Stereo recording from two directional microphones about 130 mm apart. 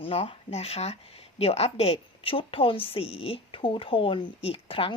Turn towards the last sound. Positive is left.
turn(degrees=45)  # may be behind; listen again after turning